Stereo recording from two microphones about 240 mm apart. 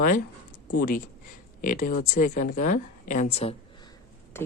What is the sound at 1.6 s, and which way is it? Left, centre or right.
A woman's voice, left.